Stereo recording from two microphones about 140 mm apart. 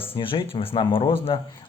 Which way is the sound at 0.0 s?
40° left (ahead or behind).